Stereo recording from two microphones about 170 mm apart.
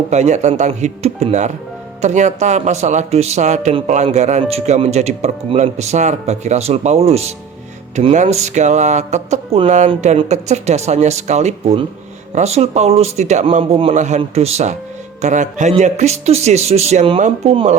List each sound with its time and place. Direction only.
0.1 s speech: 45° right (ahead or behind)
13.9 s speech: 45° right (ahead or behind)